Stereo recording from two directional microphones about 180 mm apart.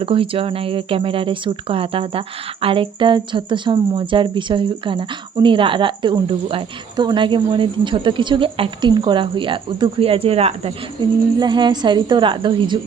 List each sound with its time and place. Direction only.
0.0 s speech: 30° right (ahead or behind)